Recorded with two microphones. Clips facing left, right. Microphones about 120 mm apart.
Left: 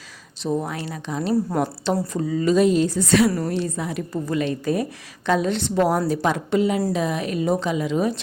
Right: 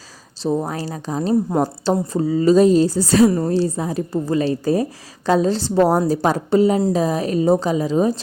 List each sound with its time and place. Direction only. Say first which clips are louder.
0.4 s a woman's voice: right 3 dB; 35° right (ahead or behind)
1.3 s a woman's voice: right 3 dB; 20° right (ahead or behind)
1.6 s a woman's voice: right 4 dB; 35° right (ahead or behind)
3.2 s a woman's voice: right 5 dB; 20° right (ahead or behind)
3.5 s a woman's voice: right 6 dB; 35° right (ahead or behind)